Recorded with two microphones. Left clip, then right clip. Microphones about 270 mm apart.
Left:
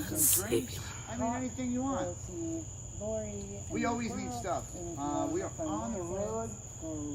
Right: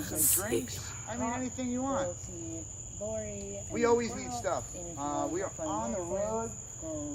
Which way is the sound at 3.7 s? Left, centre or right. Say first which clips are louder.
Right 7 dB; right.